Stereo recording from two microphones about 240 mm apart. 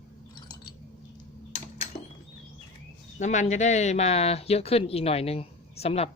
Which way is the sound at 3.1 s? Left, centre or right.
Left.